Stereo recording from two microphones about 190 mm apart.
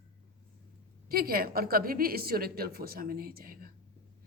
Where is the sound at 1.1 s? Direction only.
50° right (ahead or behind).